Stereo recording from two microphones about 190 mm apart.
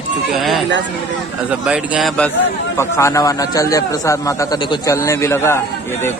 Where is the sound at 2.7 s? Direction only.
15° left (ahead or behind).